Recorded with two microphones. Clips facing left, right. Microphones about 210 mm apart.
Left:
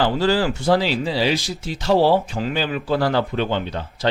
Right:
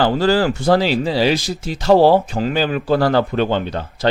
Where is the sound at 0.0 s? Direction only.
45° right (ahead or behind).